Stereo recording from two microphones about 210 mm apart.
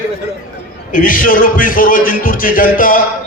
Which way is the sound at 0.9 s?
40° left (ahead or behind).